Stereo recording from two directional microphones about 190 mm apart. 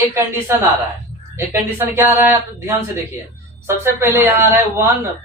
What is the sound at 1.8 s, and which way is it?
A woman's voice, 10° right (ahead or behind).